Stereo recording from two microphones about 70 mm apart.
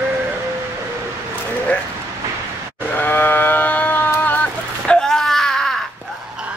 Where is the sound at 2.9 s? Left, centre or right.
Left.